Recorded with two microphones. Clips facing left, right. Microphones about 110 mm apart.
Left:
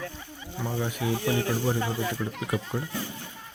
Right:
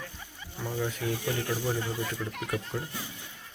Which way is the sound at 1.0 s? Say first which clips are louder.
Left 8 dB; 75° left (ahead or behind).